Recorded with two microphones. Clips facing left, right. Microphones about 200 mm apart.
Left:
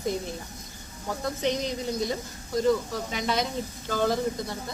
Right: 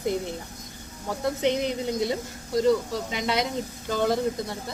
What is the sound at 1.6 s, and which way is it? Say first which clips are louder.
Speech: right 3 dB; 20° right (ahead or behind).